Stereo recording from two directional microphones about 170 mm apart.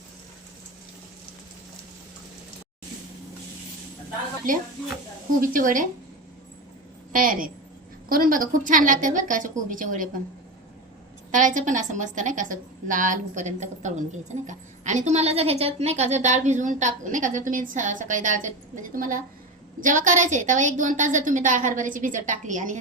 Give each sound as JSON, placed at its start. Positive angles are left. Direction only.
{"t": 5.4, "sound": "a woman's voice", "side_deg": -50}
{"t": 7.1, "sound": "a woman's voice", "side_deg": -55}
{"t": 11.3, "sound": "a woman's voice", "side_deg": -50}